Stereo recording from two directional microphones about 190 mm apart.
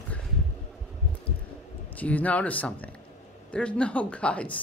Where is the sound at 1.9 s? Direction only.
10° left (ahead or behind).